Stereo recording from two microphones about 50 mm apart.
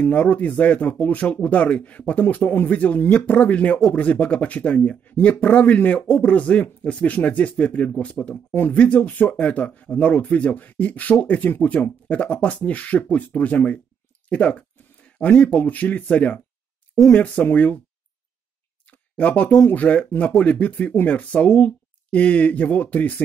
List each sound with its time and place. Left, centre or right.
0.0 s speech: left
18.9 s clicking: left
19.7 s speech: left